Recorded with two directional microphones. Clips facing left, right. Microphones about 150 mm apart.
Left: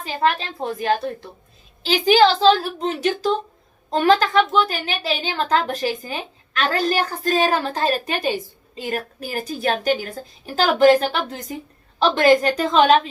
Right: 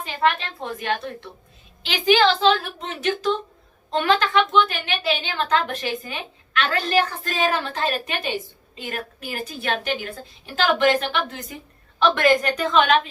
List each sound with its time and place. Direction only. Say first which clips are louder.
0.0 s a woman's voice: left 1 dB; 35° left (ahead or behind)